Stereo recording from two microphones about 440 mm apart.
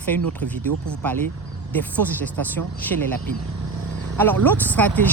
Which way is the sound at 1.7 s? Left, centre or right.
Centre.